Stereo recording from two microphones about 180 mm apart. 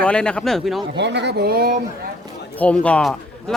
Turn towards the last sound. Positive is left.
turn(degrees=5)  # may be behind; listen again after turning